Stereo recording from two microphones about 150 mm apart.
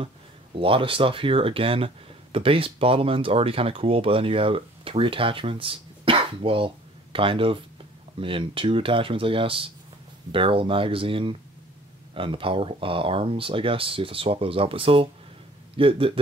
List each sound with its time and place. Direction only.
0.6 s speech: 35° right (ahead or behind)